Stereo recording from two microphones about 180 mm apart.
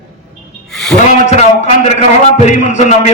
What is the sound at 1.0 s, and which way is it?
A man's voice, 40° left (ahead or behind).